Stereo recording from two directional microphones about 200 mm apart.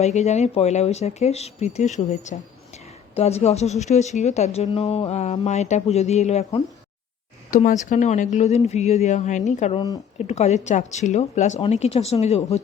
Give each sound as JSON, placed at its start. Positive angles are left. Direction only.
{"t": 0.0, "sound": "speech", "side_deg": 35}